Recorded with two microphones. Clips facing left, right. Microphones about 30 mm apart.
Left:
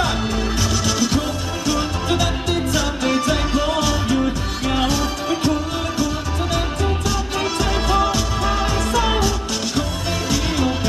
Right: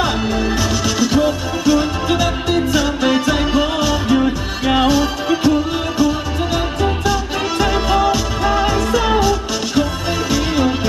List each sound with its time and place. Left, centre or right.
0.0 s music: centre
10.3 s music: centre